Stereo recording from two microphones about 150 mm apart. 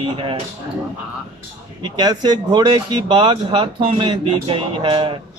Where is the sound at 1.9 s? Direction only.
30° right (ahead or behind).